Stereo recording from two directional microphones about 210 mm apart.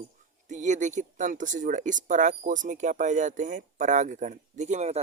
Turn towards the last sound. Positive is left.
turn(degrees=-30)  # may be behind; listen again after turning